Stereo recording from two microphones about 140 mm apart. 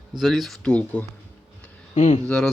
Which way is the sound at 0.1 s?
Centre (ahead or behind).